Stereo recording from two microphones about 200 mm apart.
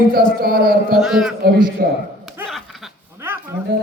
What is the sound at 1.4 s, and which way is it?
Speech, 50° right (ahead or behind).